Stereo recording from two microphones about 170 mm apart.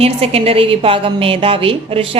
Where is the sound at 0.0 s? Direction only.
35° right (ahead or behind).